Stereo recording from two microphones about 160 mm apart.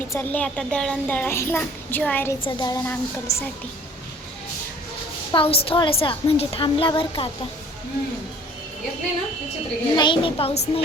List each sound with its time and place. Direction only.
0.1 s a child's voice: 10° left (ahead or behind)
2.4 s a woman's voice: 25° left (ahead or behind)
5.3 s a woman's voice: 35° left (ahead or behind)
9.9 s a woman's voice: 30° left (ahead or behind)